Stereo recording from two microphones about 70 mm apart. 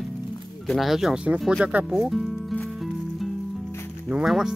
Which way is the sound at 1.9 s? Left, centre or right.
Centre.